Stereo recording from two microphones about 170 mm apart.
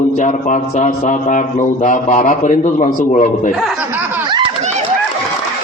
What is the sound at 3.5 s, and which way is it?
Snicker, centre (ahead or behind).